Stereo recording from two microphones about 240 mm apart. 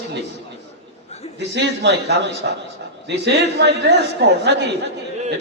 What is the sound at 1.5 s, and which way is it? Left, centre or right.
A man's voice, right.